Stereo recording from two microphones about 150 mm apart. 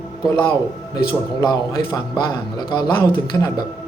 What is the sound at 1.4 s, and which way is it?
A man's voice, 25° left (ahead or behind).